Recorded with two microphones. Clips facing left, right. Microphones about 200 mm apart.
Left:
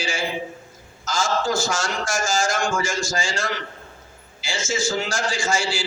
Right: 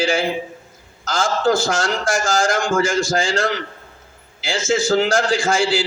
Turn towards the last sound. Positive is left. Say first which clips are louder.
# right 6 dB
turn(degrees=-55)  # may be behind; listen again after turning